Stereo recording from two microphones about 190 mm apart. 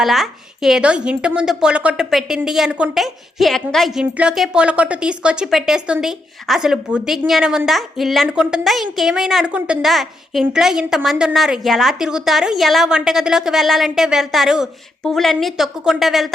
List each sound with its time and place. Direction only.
0.0 s a woman's voice: centre (ahead or behind)